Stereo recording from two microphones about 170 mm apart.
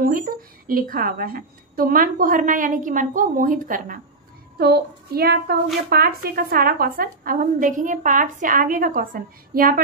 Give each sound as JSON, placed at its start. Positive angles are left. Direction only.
{"t": 0.0, "sound": "a woman's voice", "side_deg": -55}
{"t": 4.6, "sound": "a woman's voice", "side_deg": -70}